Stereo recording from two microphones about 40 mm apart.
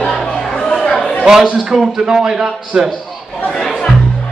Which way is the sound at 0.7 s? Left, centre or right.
Centre.